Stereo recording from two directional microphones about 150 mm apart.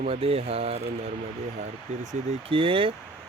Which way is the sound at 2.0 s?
55° right (ahead or behind).